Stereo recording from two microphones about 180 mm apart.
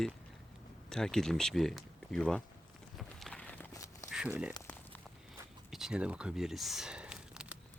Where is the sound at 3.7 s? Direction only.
20° left (ahead or behind).